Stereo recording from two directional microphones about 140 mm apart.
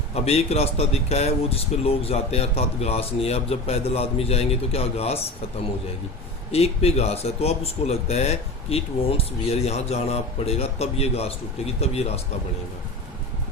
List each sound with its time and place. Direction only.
0.1 s speech: 45° left (ahead or behind)
6.5 s speech: 45° left (ahead or behind)